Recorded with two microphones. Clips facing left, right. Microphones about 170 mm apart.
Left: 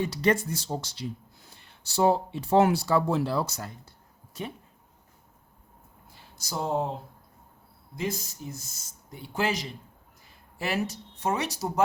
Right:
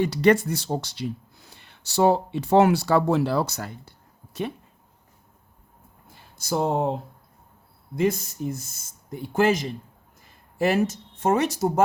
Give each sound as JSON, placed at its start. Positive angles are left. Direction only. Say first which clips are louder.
{"t": 0.0, "sound": "speech", "louder": "right 6 dB", "side_deg": -70}
{"t": 6.3, "sound": "speech", "louder": "right 5 dB", "side_deg": -60}
{"t": 7.9, "sound": "speech", "louder": "right 9 dB", "side_deg": -55}